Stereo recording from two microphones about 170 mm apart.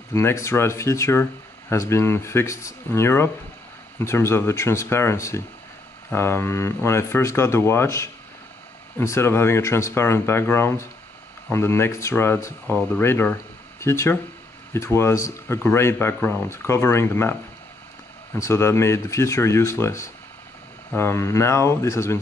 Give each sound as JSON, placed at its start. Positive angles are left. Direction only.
{"t": 0.1, "sound": "speech", "side_deg": 15}
{"t": 18.4, "sound": "speech", "side_deg": 15}